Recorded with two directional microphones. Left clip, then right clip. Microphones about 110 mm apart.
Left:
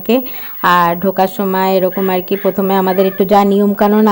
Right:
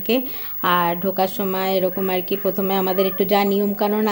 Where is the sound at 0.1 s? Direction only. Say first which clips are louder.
Left 6 dB; 40° left (ahead or behind).